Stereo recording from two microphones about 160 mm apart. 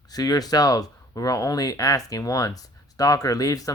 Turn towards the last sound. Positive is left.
turn(degrees=20)  # may be behind; listen again after turning